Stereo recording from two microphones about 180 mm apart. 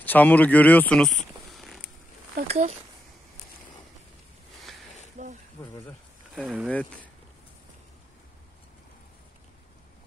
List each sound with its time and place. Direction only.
0.0 s speech: 10° left (ahead or behind)
2.4 s speech: 35° right (ahead or behind)
5.2 s a sound: 40° right (ahead or behind)
6.4 s speech: 5° right (ahead or behind)
6.7 s speech: 10° left (ahead or behind)